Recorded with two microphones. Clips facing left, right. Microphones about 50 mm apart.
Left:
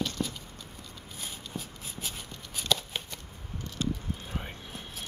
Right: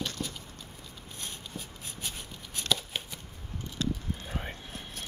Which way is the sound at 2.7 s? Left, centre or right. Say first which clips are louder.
Left 1 dB; centre.